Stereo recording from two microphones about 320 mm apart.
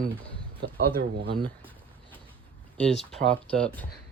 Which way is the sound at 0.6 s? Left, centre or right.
Right.